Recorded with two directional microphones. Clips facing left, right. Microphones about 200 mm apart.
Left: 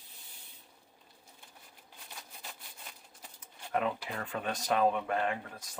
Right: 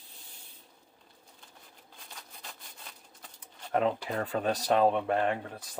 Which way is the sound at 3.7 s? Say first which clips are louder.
Right 5 dB; 35° right (ahead or behind).